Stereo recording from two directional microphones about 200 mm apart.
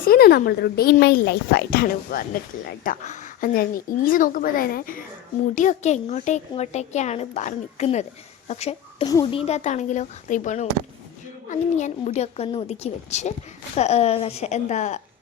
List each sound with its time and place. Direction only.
0.0 s a woman's voice: 50° left (ahead or behind)